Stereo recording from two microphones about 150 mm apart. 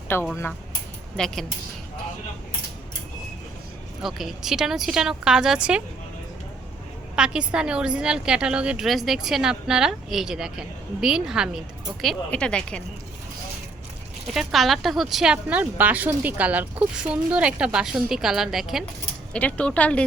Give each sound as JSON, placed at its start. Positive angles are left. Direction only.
{"t": 0.1, "sound": "speech", "side_deg": 15}
{"t": 1.1, "sound": "speech", "side_deg": 5}
{"t": 4.0, "sound": "speech", "side_deg": 0}
{"t": 7.2, "sound": "speech", "side_deg": -5}
{"t": 14.3, "sound": "speech", "side_deg": 0}
{"t": 19.3, "sound": "speech", "side_deg": 10}